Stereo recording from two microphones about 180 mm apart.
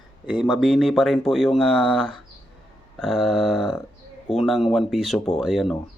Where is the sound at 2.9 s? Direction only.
Centre (ahead or behind).